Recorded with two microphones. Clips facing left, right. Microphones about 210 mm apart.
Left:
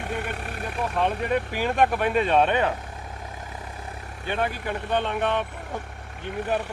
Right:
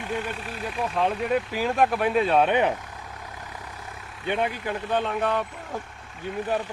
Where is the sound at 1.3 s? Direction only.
Centre (ahead or behind).